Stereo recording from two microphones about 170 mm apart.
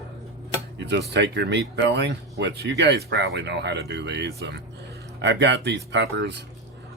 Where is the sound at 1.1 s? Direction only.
90° right.